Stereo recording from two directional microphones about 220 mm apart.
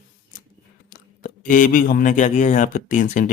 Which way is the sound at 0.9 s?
40° left (ahead or behind).